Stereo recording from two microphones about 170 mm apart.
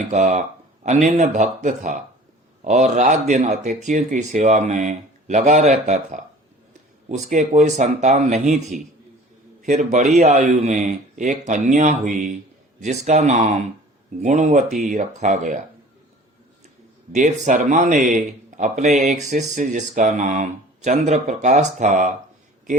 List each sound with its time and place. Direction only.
0.1 s speech: 40° right (ahead or behind)
17.1 s speech: 45° right (ahead or behind)